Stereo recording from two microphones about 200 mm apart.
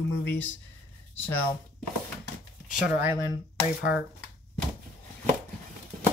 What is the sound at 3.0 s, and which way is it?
Speech, 10° right (ahead or behind).